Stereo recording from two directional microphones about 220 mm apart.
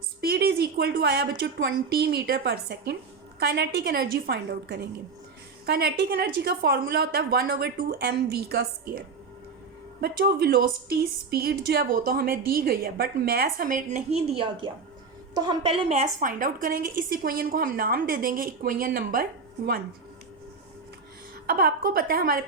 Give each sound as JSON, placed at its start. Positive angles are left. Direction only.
{"t": 0.2, "sound": "a woman's voice", "side_deg": -45}
{"t": 21.4, "sound": "a woman's voice", "side_deg": -45}